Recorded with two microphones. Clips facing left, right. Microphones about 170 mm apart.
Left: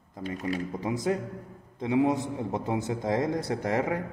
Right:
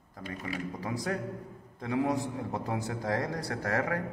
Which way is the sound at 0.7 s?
20° left (ahead or behind).